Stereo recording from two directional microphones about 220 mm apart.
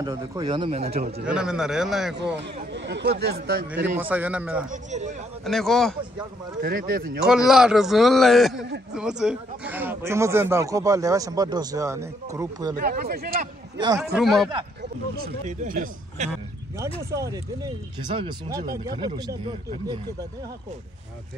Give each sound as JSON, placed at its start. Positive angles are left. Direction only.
{"t": 0.0, "sound": "speech", "side_deg": -15}
{"t": 1.2, "sound": "a man's voice", "side_deg": -5}
{"t": 2.1, "sound": "speech", "side_deg": -50}
{"t": 3.7, "sound": "speech", "side_deg": -5}
{"t": 4.6, "sound": "a man's voice", "side_deg": -30}
{"t": 5.4, "sound": "a man's voice", "side_deg": 0}
{"t": 6.6, "sound": "a man's voice", "side_deg": -40}
{"t": 7.2, "sound": "a man's voice", "side_deg": -5}
{"t": 12.7, "sound": "speech", "side_deg": -40}
{"t": 13.7, "sound": "a man's voice", "side_deg": -15}
{"t": 14.1, "sound": "a man's voice", "side_deg": 0}
{"t": 14.8, "sound": "a man's voice", "side_deg": -45}
{"t": 17.1, "sound": "speech", "side_deg": -15}